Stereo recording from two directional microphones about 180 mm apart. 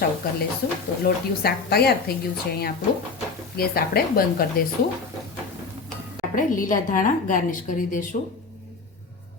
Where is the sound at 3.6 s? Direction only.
60° left (ahead or behind).